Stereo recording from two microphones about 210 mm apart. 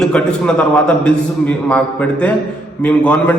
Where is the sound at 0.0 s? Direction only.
5° left (ahead or behind).